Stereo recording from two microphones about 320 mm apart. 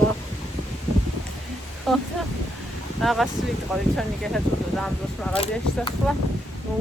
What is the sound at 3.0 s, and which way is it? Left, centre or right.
Speech, centre.